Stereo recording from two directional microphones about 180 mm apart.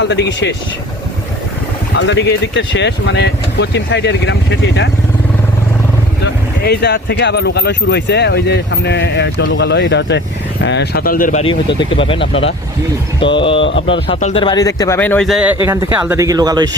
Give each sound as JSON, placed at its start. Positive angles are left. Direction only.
{"t": 0.1, "sound": "speech", "side_deg": 75}
{"t": 2.0, "sound": "speech", "side_deg": 80}
{"t": 6.2, "sound": "speech", "side_deg": 65}
{"t": 11.8, "sound": "speech", "side_deg": 30}
{"t": 13.2, "sound": "speech", "side_deg": 30}
{"t": 14.4, "sound": "speech", "side_deg": 20}
{"t": 15.3, "sound": "speech", "side_deg": -5}